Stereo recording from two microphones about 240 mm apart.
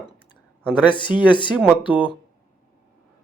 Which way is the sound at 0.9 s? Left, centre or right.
Centre.